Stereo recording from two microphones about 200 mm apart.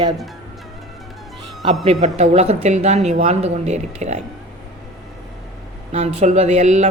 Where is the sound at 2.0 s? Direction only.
35° right (ahead or behind).